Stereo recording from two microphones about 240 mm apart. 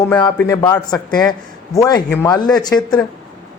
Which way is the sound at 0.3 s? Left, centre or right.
Centre.